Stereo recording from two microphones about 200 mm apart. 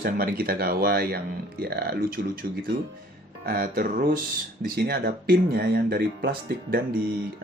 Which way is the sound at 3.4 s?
45° right (ahead or behind).